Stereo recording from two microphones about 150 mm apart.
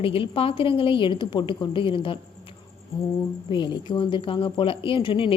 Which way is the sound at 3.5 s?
30° left (ahead or behind).